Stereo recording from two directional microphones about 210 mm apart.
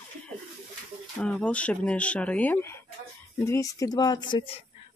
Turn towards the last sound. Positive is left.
turn(degrees=20)  # may be behind; listen again after turning